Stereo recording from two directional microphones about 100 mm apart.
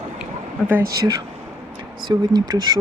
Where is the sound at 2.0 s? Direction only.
45° right (ahead or behind).